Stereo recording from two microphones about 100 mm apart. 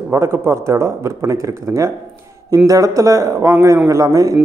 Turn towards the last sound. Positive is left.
turn(degrees=-35)  # may be behind; listen again after turning